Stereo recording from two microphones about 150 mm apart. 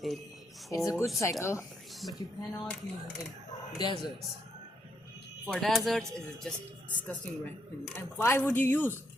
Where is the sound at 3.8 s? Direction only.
30° left (ahead or behind).